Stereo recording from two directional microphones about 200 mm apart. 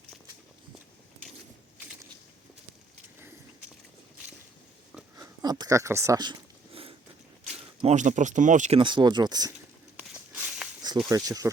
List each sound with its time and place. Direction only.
5.1 s a sound: 20° right (ahead or behind)
7.8 s speech: 35° right (ahead or behind)
8.8 s speech: 25° right (ahead or behind)
10.0 s walk: 5° right (ahead or behind)
11.1 s speech: 15° right (ahead or behind)